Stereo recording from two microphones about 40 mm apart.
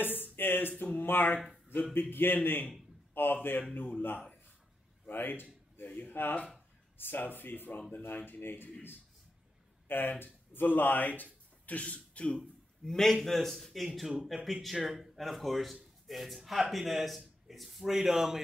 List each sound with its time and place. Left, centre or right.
0.0 s a sound: left
1.0 s speech: left
3.7 s speech: left
5.0 s a sound: left
5.9 s speech: left
9.8 s speech: left
11.6 s speech: left
12.8 s a man's voice: centre